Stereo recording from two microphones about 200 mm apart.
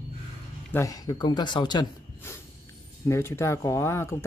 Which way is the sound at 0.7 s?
15° left (ahead or behind).